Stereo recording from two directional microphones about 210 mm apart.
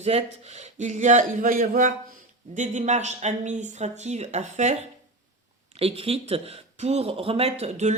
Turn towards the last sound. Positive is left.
turn(degrees=-30)  # may be behind; listen again after turning